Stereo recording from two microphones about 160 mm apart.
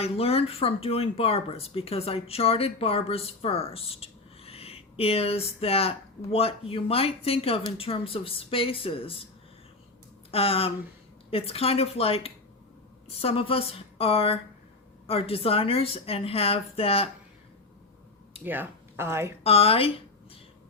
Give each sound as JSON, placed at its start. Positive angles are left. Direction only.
{"t": 0.0, "sound": "speech", "side_deg": 40}
{"t": 10.3, "sound": "speech", "side_deg": 35}
{"t": 18.4, "sound": "speech", "side_deg": -10}
{"t": 19.4, "sound": "speech", "side_deg": 35}